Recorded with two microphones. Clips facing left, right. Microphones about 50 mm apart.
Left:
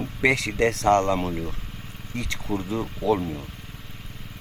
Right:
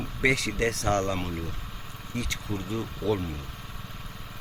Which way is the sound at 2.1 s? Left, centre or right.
Left.